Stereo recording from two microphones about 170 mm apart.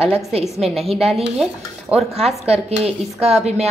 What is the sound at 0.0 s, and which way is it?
Speech, 35° right (ahead or behind).